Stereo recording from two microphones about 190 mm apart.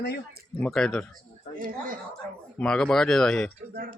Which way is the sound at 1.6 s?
50° right (ahead or behind).